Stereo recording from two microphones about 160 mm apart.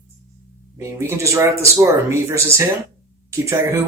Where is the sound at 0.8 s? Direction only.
20° right (ahead or behind).